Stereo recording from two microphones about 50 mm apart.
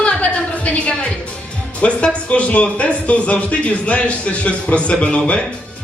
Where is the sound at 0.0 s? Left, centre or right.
Left.